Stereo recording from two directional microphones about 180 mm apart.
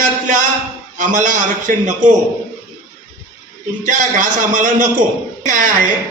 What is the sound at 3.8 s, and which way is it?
A man's voice, 45° right (ahead or behind).